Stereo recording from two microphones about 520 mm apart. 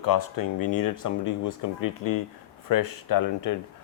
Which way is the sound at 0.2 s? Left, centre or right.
Left.